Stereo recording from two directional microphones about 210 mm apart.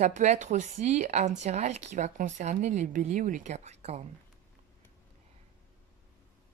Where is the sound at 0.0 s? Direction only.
35° right (ahead or behind).